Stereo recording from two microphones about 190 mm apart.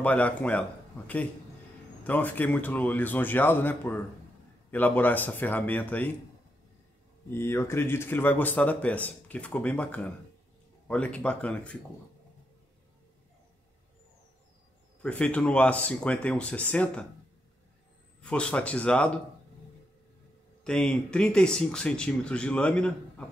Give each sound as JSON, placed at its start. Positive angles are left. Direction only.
{"t": 0.0, "sound": "speech", "side_deg": 5}
{"t": 7.2, "sound": "speech", "side_deg": 15}
{"t": 15.0, "sound": "speech", "side_deg": 5}
{"t": 18.2, "sound": "speech", "side_deg": 5}
{"t": 20.6, "sound": "speech", "side_deg": 5}